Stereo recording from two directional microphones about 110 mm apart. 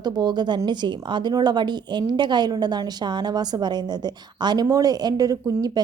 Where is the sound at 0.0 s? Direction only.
40° right (ahead or behind).